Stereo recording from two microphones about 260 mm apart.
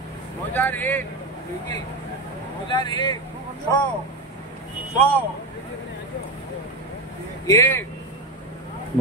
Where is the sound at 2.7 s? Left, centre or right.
Centre.